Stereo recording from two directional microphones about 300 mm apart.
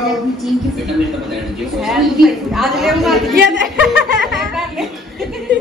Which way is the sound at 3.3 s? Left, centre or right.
Right.